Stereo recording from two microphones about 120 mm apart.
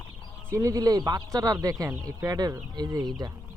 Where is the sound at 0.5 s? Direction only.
25° right (ahead or behind).